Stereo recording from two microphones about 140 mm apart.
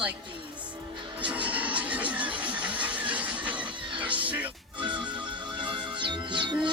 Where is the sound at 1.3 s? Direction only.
10° right (ahead or behind).